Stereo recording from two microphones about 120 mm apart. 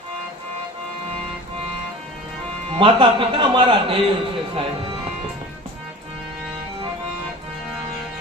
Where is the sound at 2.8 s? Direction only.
40° right (ahead or behind).